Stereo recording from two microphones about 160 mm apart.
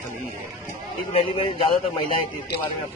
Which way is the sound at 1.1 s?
40° left (ahead or behind).